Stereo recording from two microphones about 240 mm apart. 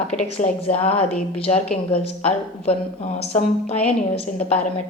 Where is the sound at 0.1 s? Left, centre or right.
Left.